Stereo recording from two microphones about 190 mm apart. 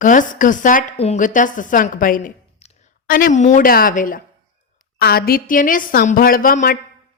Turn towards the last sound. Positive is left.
turn(degrees=45)  # may be behind; listen again after turning